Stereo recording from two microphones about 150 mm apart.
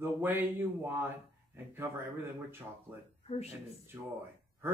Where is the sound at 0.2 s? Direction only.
15° right (ahead or behind).